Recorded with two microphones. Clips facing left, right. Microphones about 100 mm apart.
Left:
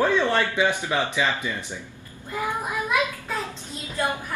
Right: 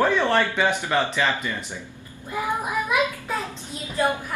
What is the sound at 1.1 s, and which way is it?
Speech, 15° left (ahead or behind).